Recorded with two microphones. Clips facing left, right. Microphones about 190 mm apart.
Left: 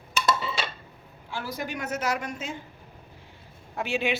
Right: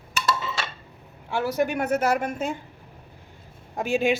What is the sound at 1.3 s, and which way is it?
A woman's voice, 65° right (ahead or behind).